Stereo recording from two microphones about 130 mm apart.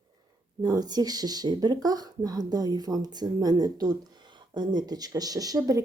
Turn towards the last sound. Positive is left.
turn(degrees=-30)  # may be behind; listen again after turning